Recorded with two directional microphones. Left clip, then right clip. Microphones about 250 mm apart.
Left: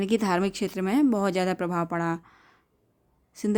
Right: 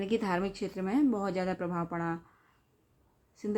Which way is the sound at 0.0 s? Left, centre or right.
Left.